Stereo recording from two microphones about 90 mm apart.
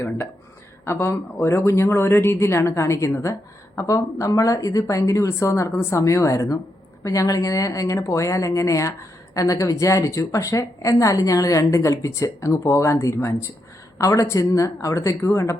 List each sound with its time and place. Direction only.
0.9 s speech: 30° left (ahead or behind)